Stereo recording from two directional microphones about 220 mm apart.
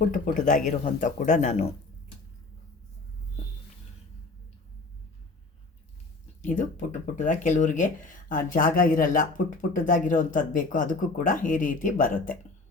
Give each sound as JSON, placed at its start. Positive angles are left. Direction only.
{"t": 0.1, "sound": "speech", "side_deg": 35}
{"t": 6.4, "sound": "speech", "side_deg": 35}